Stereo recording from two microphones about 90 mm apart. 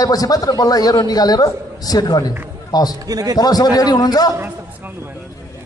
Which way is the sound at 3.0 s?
45° right (ahead or behind).